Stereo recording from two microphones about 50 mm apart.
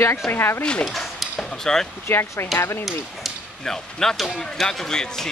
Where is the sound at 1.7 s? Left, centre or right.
Centre.